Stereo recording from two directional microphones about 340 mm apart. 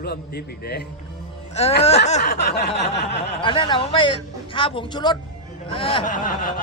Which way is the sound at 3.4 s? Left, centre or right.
Centre.